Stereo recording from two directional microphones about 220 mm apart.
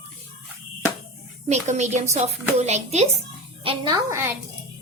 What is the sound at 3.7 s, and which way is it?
Speech, 20° right (ahead or behind).